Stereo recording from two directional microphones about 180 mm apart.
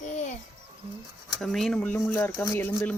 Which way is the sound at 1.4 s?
Centre (ahead or behind).